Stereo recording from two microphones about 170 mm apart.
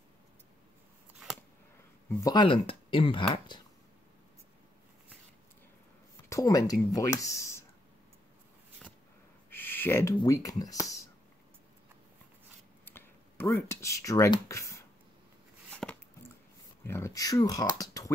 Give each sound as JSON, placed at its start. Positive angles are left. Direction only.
{"t": 2.0, "sound": "speech", "side_deg": 20}
{"t": 6.2, "sound": "speech", "side_deg": 20}
{"t": 9.5, "sound": "a sound", "side_deg": 10}
{"t": 10.1, "sound": "speech", "side_deg": 20}
{"t": 12.8, "sound": "speech", "side_deg": 10}
{"t": 15.7, "sound": "a sound", "side_deg": 5}
{"t": 16.8, "sound": "speech", "side_deg": 15}